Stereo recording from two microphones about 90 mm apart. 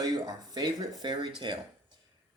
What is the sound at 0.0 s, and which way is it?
Speech, 50° right (ahead or behind).